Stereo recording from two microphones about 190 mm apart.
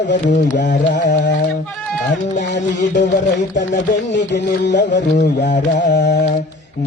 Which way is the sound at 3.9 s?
70° left (ahead or behind).